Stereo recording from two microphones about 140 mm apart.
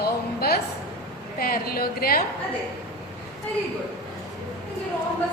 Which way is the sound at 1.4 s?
90° left.